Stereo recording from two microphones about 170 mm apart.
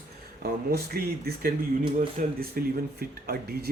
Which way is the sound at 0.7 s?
70° right (ahead or behind).